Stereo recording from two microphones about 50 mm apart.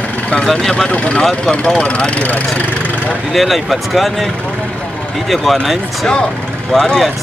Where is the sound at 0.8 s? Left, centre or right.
Left.